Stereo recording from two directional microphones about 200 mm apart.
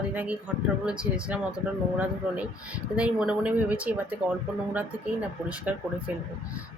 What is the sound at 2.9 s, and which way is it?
Speech, 5° right (ahead or behind).